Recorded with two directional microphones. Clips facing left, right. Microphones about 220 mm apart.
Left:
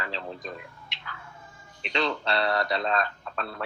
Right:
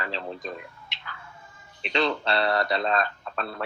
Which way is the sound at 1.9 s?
30° right (ahead or behind).